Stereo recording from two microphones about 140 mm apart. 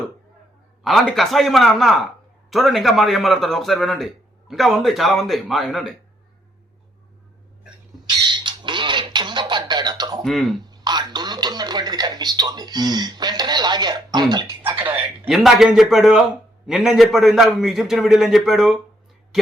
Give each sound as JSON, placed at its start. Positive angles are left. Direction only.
{"t": 0.9, "sound": "a man's voice", "side_deg": 0}
{"t": 8.0, "sound": "squawk", "side_deg": -35}
{"t": 10.2, "sound": "a man's voice", "side_deg": 0}
{"t": 10.7, "sound": "speech", "side_deg": -30}
{"t": 14.8, "sound": "a sound", "side_deg": -15}
{"t": 15.3, "sound": "a man's voice", "side_deg": 0}